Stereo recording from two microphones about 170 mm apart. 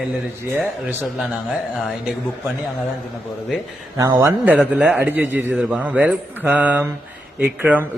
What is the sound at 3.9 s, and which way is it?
A man's voice, 20° right (ahead or behind).